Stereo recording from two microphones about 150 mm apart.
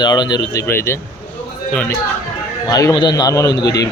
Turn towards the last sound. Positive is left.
turn(degrees=25)  # may be behind; listen again after turning